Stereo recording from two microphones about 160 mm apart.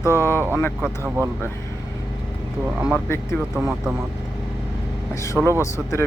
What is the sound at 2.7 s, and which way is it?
Speech, 5° right (ahead or behind).